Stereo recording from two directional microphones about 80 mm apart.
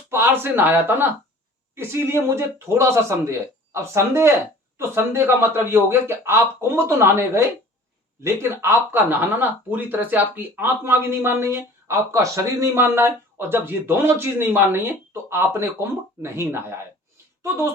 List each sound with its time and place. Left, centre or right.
0.1 s speech: right